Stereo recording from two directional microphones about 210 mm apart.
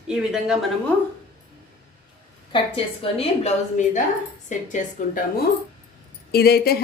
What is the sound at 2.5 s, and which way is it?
A woman's voice, 25° left (ahead or behind).